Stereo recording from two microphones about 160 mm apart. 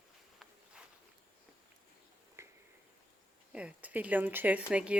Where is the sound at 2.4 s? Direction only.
15° right (ahead or behind).